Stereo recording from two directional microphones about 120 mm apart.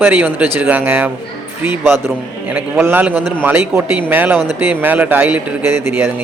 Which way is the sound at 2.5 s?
15° right (ahead or behind).